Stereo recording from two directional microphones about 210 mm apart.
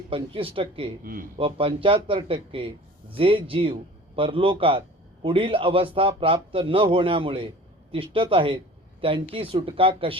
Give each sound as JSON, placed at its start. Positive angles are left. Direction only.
{"t": 0.1, "sound": "a man's voice", "side_deg": -25}
{"t": 1.0, "sound": "a man's voice", "side_deg": -40}
{"t": 1.4, "sound": "a man's voice", "side_deg": -25}